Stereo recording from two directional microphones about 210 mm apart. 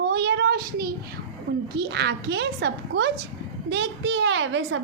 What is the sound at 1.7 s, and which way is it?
A woman's voice, 55° right (ahead or behind).